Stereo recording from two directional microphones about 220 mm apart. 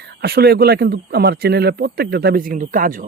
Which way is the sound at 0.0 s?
45° right (ahead or behind).